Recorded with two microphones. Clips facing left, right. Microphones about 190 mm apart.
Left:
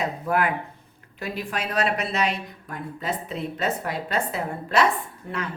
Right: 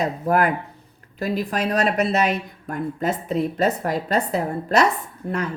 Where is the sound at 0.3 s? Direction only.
40° right (ahead or behind).